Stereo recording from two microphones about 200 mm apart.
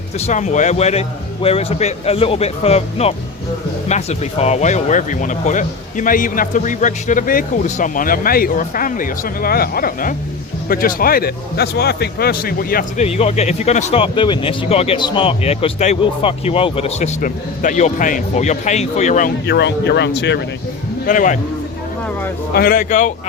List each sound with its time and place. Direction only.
0.3 s speech: 35° left (ahead or behind)
13.1 s speech: 30° left (ahead or behind)
19.5 s speech: 60° left (ahead or behind)
21.1 s speech: 40° left (ahead or behind)
22.5 s speech: 50° left (ahead or behind)